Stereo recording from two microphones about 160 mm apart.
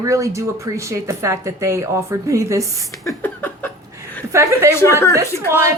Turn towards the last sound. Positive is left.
turn(degrees=20)  # may be behind; listen again after turning